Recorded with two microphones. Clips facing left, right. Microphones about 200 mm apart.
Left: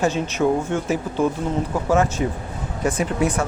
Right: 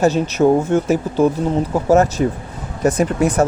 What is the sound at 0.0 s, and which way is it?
Speech, 40° right (ahead or behind).